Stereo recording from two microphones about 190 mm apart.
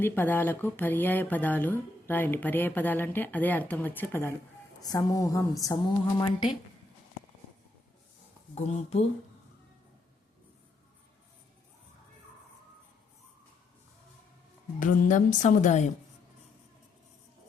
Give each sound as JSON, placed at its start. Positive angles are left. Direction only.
{"t": 0.0, "sound": "speech", "side_deg": 10}
{"t": 8.5, "sound": "speech", "side_deg": 30}
{"t": 14.8, "sound": "a woman's voice", "side_deg": 45}